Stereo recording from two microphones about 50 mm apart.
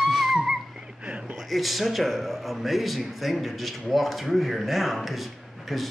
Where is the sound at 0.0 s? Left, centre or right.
Centre.